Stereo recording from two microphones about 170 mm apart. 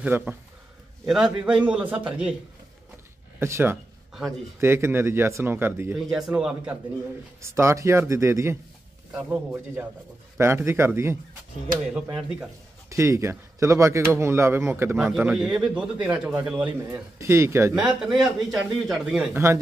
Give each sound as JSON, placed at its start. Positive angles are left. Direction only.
{"t": 0.0, "sound": "speech", "side_deg": -10}
{"t": 3.3, "sound": "speech", "side_deg": -15}
{"t": 5.9, "sound": "a man's voice", "side_deg": 0}
{"t": 7.4, "sound": "a man's voice", "side_deg": -15}
{"t": 12.9, "sound": "speech", "side_deg": -15}
{"t": 18.2, "sound": "a man's voice", "side_deg": 0}
{"t": 19.3, "sound": "speech", "side_deg": -15}